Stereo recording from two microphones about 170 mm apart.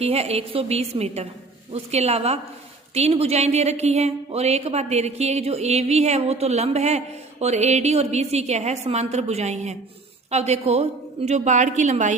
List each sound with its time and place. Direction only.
0.0 s a woman's voice: 35° right (ahead or behind)